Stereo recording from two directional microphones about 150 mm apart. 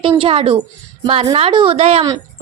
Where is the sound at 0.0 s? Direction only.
35° right (ahead or behind).